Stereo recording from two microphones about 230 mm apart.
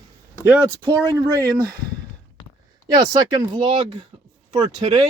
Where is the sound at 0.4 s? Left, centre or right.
Centre.